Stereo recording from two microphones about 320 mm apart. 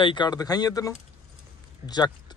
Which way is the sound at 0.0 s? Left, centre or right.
Centre.